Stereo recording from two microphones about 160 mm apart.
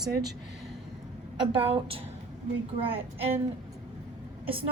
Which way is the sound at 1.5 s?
35° right (ahead or behind).